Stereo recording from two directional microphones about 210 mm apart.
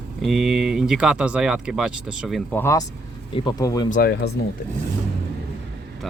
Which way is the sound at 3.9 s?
50° left (ahead or behind).